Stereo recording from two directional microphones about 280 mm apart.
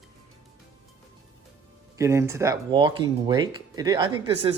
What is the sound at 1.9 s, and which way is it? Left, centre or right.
Speech, centre.